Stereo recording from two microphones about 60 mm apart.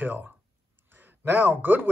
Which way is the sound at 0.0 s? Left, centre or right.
Right.